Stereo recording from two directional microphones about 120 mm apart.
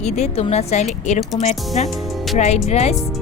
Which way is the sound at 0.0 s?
65° left (ahead or behind).